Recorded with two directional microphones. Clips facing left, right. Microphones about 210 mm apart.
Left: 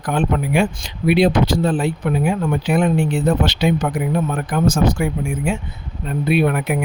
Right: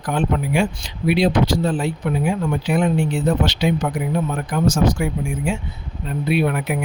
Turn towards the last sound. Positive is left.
turn(degrees=55)  # may be behind; listen again after turning